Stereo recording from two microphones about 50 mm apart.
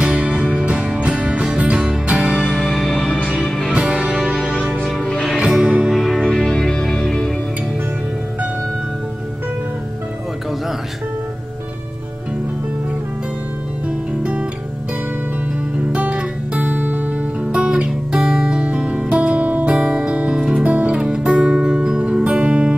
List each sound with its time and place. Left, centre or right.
0.0 s music: right
2.7 s music: left
3.7 s music: right
5.4 s music: right
5.9 s music: centre
6.3 s music: centre
15.9 s music: right
17.6 s music: centre